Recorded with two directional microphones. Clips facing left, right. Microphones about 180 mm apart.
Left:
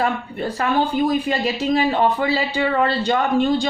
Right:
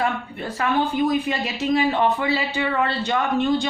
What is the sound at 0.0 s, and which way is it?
Speech, 35° left (ahead or behind).